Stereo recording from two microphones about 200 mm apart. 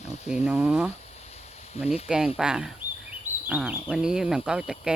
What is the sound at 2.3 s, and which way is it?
Speech, 5° right (ahead or behind).